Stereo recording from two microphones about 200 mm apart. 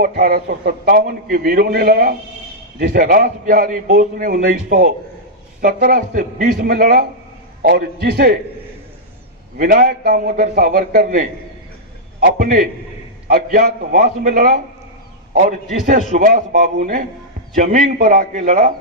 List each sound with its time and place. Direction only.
0.0 s a man's voice: 45° right (ahead or behind)
9.6 s a man's voice: 45° right (ahead or behind)
16.1 s a man's voice: 40° right (ahead or behind)